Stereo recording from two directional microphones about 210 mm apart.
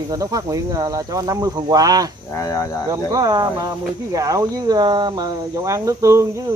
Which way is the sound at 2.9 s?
20° right (ahead or behind).